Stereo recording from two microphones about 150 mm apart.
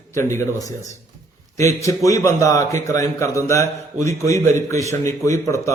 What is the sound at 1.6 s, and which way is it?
A man's voice, 20° left (ahead or behind).